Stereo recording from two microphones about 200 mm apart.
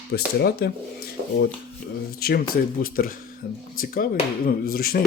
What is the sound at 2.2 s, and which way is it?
Speech, 50° left (ahead or behind).